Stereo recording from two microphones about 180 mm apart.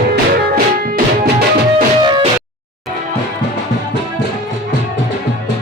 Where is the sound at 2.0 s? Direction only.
25° right (ahead or behind).